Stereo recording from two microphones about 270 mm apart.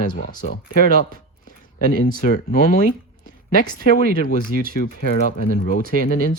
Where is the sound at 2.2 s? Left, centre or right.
Left.